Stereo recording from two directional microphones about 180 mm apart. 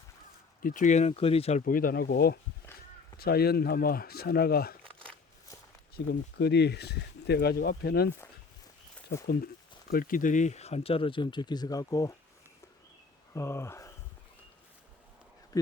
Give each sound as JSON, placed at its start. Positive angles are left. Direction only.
{"t": 0.6, "sound": "speech", "side_deg": 45}
{"t": 1.6, "sound": "speech", "side_deg": 55}
{"t": 6.1, "sound": "speech", "side_deg": 70}
{"t": 9.2, "sound": "speech", "side_deg": 60}
{"t": 13.3, "sound": "speech", "side_deg": 15}